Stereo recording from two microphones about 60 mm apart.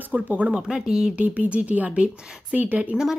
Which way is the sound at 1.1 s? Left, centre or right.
Right.